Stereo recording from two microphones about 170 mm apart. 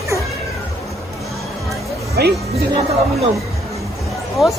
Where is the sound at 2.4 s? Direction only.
35° right (ahead or behind).